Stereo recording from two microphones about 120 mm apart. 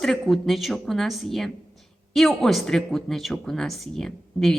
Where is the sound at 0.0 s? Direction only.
Centre (ahead or behind).